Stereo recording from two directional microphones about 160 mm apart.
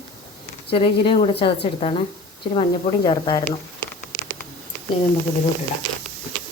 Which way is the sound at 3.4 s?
15° left (ahead or behind).